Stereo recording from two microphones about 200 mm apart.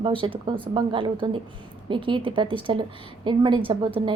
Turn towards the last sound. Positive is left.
turn(degrees=-25)  # may be behind; listen again after turning